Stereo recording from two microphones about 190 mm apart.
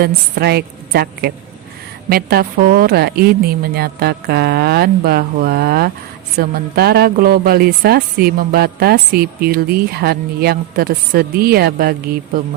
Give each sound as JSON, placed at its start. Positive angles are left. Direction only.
{"t": 0.0, "sound": "a woman's voice", "side_deg": -55}